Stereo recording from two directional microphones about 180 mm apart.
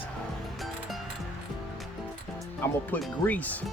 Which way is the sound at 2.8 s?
10° left (ahead or behind).